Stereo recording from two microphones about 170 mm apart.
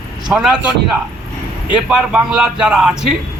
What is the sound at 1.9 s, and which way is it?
A man's voice, 5° right (ahead or behind).